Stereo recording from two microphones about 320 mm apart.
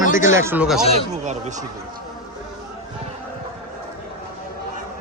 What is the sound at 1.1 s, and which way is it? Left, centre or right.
Speech, right.